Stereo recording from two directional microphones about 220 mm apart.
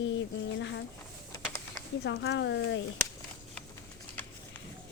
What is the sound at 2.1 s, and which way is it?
Speech, 55° left (ahead or behind).